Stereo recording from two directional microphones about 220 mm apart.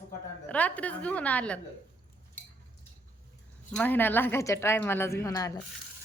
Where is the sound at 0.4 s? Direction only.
5° left (ahead or behind).